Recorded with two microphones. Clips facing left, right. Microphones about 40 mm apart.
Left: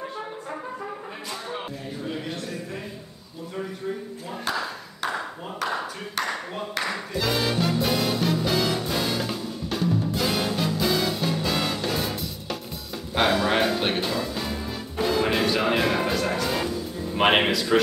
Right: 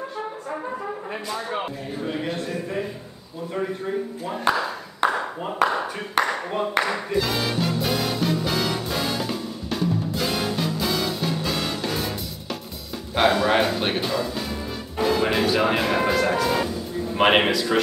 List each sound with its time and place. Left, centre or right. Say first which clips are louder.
2.3 s a sound: right 5 dB; right
3.5 s speech: right 5 dB; right
5.0 s a sound: right 7 dB; right
5.4 s speech: right 9 dB; right
7.2 s music: left 1 dB; centre
13.1 s speech: right 3 dB; centre
16.3 s music: right 4 dB; centre
17.1 s speech: right 2 dB; centre